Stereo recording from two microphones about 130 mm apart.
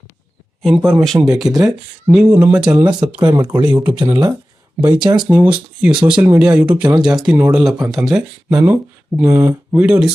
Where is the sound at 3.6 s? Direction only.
10° right (ahead or behind).